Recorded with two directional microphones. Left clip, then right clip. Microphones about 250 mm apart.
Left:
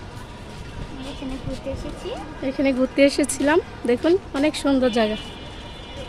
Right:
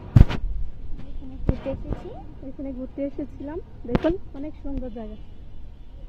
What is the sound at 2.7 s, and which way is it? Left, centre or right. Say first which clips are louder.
Speech: left 14 dB; centre.